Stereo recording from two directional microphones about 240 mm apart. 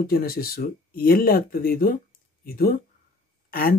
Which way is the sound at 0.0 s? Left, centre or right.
Left.